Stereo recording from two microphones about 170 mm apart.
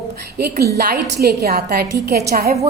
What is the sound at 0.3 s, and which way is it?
A woman's voice, 65° right (ahead or behind).